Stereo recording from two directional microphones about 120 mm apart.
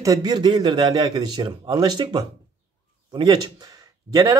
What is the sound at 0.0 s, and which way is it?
A man's voice, 30° right (ahead or behind).